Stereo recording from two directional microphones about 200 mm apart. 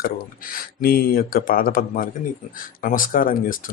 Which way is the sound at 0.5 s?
45° left (ahead or behind).